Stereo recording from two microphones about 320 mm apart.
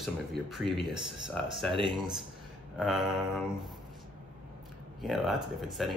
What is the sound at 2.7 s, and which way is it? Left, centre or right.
Speech, centre.